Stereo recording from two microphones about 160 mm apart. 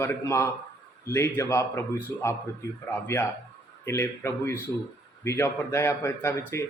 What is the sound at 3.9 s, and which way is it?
A man's voice, 15° left (ahead or behind).